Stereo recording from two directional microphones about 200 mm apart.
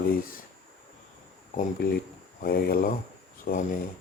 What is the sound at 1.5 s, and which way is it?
Speech, 50° left (ahead or behind).